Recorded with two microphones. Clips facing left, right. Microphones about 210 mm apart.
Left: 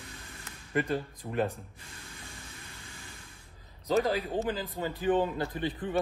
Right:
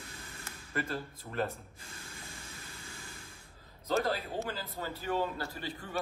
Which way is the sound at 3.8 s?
15° left (ahead or behind).